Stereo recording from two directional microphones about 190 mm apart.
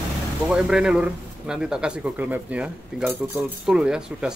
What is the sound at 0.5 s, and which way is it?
A man's voice, 5° right (ahead or behind).